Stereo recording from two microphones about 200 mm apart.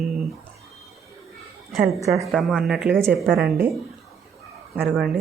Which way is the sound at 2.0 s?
15° right (ahead or behind).